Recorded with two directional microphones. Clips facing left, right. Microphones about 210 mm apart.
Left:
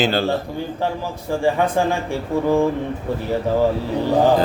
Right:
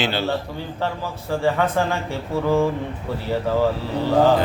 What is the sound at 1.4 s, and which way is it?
Speech, 15° left (ahead or behind).